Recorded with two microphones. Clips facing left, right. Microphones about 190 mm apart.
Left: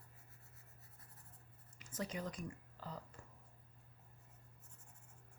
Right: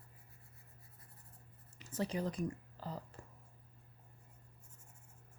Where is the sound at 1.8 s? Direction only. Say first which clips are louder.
Right 6 dB; 30° right (ahead or behind).